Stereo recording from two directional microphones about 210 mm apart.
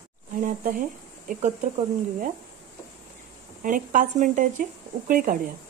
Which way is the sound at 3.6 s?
40° right (ahead or behind).